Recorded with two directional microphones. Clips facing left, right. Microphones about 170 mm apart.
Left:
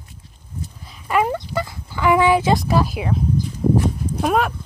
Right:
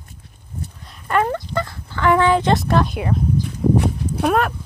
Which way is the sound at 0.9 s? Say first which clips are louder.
Even; 5° left (ahead or behind).